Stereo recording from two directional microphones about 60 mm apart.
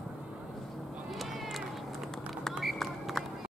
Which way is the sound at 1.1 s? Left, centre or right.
Centre.